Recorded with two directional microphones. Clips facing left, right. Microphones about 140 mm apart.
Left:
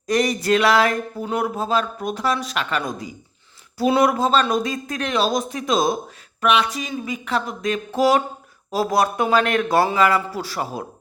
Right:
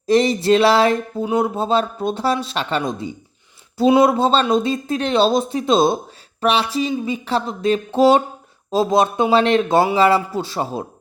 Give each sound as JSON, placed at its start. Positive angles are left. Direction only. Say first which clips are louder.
{"t": 0.1, "sound": "speech", "louder": "right 4 dB", "side_deg": -25}
{"t": 1.2, "sound": "speech", "louder": "right 5 dB", "side_deg": -15}
{"t": 1.5, "sound": "speech", "louder": "right 3 dB", "side_deg": -30}